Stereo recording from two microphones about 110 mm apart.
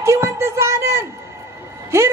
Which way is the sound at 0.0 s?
25° right (ahead or behind).